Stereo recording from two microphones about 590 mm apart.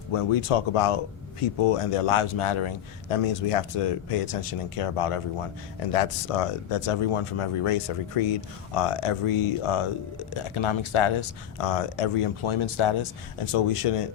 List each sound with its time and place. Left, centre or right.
0.1 s speech: left